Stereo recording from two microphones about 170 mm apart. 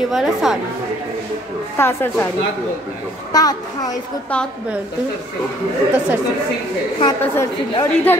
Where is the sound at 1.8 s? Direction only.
15° left (ahead or behind).